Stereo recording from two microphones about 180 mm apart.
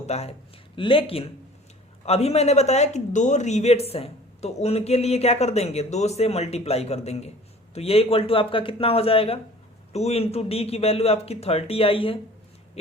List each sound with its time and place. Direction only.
0.0 s a man's voice: 35° left (ahead or behind)